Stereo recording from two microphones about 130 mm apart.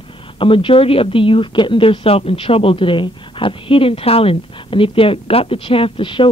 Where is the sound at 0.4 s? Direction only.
40° left (ahead or behind).